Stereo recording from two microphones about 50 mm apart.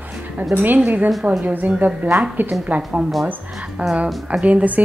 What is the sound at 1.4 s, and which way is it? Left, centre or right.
A woman's voice, right.